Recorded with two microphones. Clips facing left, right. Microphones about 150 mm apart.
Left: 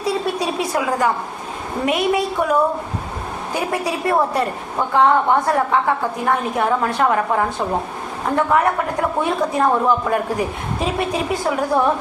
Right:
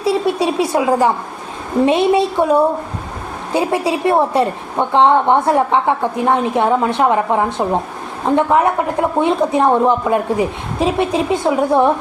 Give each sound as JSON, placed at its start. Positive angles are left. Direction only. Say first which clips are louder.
{"t": 0.0, "sound": "a woman's voice", "louder": "right 5 dB", "side_deg": -25}